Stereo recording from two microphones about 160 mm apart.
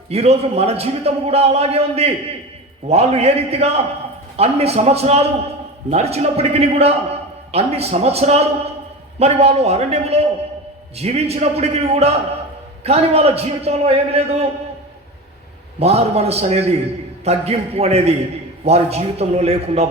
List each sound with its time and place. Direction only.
0.1 s a man's voice: 40° right (ahead or behind)
15.8 s a man's voice: 40° right (ahead or behind)